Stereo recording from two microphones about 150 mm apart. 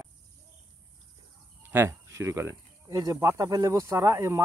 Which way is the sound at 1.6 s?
15° right (ahead or behind).